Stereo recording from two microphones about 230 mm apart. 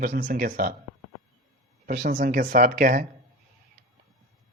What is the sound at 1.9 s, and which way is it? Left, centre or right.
Speech, right.